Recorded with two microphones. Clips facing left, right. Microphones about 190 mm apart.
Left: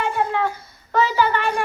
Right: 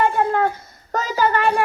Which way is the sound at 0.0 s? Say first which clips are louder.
Right 4 dB; 50° right (ahead or behind).